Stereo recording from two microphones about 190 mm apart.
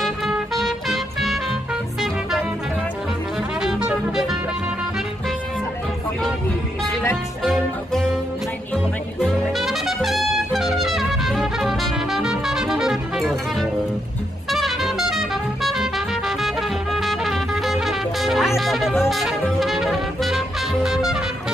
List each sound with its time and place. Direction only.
0.0 s music: centre (ahead or behind)
3.6 s music: 5° right (ahead or behind)
7.4 s music: centre (ahead or behind)